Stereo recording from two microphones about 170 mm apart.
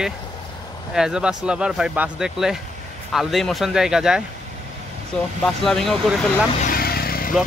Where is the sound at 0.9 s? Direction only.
5° right (ahead or behind).